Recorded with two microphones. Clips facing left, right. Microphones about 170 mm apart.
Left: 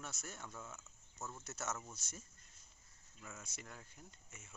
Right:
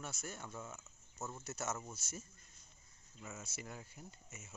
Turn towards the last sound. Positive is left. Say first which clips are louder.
# right 4 dB
turn(degrees=-10)  # may be behind; listen again after turning